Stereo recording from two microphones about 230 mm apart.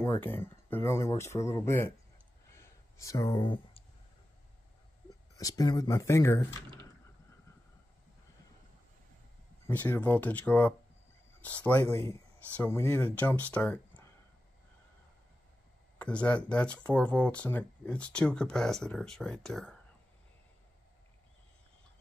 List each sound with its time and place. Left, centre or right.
0.0 s speech: centre
2.5 s a sound: centre
5.4 s speech: centre
9.7 s speech: centre
16.0 s speech: centre